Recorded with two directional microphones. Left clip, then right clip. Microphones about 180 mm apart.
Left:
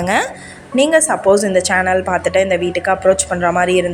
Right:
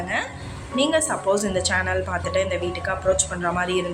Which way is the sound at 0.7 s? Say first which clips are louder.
Left 9 dB; 35° left (ahead or behind).